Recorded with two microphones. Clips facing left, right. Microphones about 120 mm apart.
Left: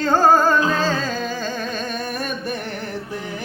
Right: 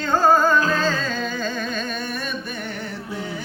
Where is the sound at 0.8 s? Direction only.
40° left (ahead or behind).